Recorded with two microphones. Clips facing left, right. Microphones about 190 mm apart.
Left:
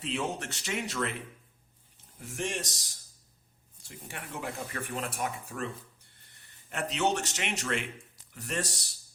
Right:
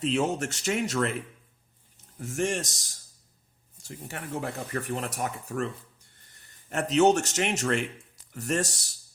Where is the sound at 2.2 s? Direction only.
45° right (ahead or behind).